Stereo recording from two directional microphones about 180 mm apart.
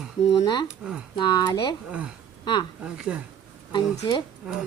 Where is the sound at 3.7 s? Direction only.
25° left (ahead or behind).